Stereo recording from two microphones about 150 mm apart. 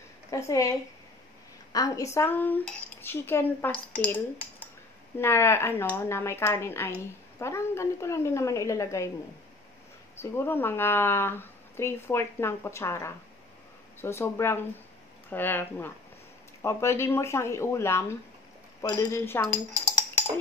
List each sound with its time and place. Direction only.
0.3 s speech: 20° left (ahead or behind)
10.1 s speech: 15° left (ahead or behind)